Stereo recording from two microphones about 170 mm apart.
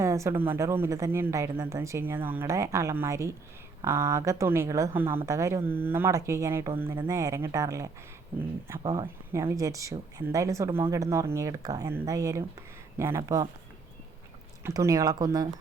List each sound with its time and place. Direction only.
0.0 s speech: 15° right (ahead or behind)
8.8 s speech: 30° right (ahead or behind)
9.3 s speech: 15° right (ahead or behind)
14.6 s speech: 20° right (ahead or behind)